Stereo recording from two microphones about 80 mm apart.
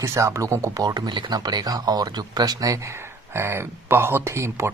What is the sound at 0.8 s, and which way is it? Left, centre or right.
Speech, right.